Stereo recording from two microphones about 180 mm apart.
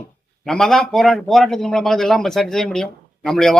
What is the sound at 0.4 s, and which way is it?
A man's voice, centre (ahead or behind).